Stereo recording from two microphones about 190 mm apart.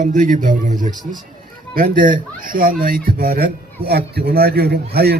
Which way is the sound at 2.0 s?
45° right (ahead or behind).